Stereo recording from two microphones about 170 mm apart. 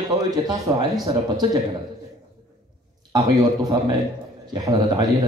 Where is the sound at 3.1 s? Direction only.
20° right (ahead or behind).